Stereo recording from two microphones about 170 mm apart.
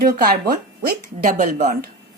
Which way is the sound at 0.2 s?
60° right (ahead or behind).